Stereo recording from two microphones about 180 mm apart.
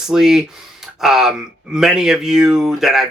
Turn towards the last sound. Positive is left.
turn(degrees=0)  # may be behind; listen again after turning